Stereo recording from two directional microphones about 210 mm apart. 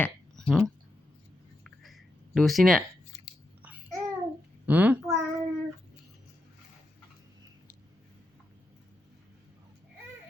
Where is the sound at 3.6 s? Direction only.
5° right (ahead or behind).